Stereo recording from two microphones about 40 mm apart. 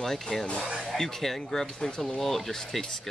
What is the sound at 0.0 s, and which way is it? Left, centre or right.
Speech, centre.